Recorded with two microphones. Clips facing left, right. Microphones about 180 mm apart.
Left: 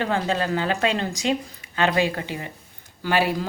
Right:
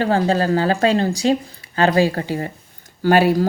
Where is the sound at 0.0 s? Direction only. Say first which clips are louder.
Right 6 dB; 35° right (ahead or behind).